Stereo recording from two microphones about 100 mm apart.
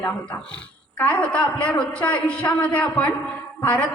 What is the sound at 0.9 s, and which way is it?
A woman's voice, 15° left (ahead or behind).